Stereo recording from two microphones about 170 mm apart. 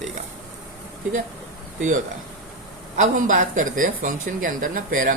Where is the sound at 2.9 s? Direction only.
45° right (ahead or behind).